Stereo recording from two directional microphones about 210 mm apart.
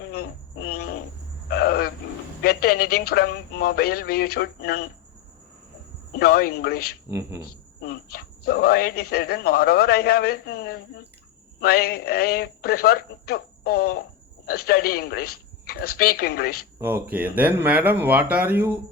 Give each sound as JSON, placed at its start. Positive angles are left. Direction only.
{"t": 0.1, "sound": "a sound", "side_deg": 45}
{"t": 2.4, "sound": "speech", "side_deg": 45}
{"t": 6.1, "sound": "speech", "side_deg": 45}
{"t": 7.1, "sound": "speech", "side_deg": -15}
{"t": 7.4, "sound": "speech", "side_deg": 45}
{"t": 16.8, "sound": "speech", "side_deg": -10}